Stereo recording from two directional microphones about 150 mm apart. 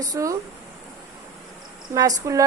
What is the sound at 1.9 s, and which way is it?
Speech, 25° right (ahead or behind).